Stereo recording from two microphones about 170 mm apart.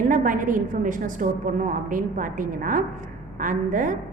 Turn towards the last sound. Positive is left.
turn(degrees=-50)  # may be behind; listen again after turning